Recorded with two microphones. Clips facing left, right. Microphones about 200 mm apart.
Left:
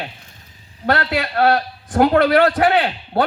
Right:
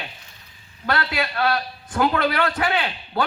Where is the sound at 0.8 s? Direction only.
55° left (ahead or behind).